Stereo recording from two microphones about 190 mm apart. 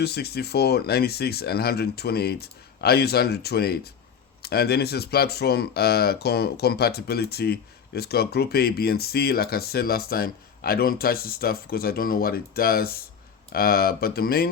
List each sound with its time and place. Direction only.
0.0 s speech: 55° left (ahead or behind)